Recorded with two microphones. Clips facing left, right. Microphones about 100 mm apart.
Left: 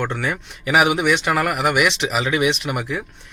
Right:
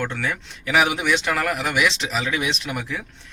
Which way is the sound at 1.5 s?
60° left (ahead or behind).